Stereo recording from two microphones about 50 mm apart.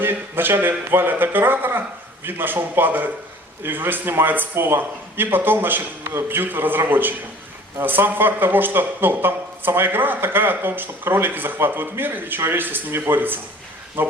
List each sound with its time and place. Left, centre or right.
0.0 s speech: right